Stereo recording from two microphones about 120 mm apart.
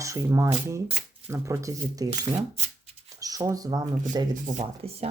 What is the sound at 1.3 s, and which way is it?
Speech, 25° right (ahead or behind).